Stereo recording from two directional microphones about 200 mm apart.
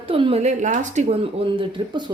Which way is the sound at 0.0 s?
25° right (ahead or behind).